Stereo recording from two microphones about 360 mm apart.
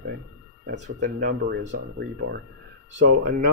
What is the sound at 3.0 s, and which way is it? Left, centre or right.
Speech, right.